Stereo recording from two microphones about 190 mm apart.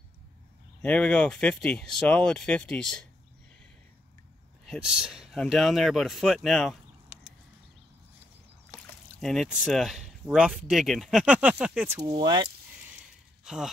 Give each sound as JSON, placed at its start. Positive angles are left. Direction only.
{"t": 0.8, "sound": "speech", "side_deg": 5}
{"t": 4.6, "sound": "speech", "side_deg": -5}
{"t": 8.7, "sound": "speech", "side_deg": 5}
{"t": 12.1, "sound": "speech", "side_deg": -25}
{"t": 13.4, "sound": "a sound", "side_deg": -5}